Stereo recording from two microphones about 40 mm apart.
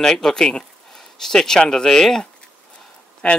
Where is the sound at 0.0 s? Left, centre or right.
Centre.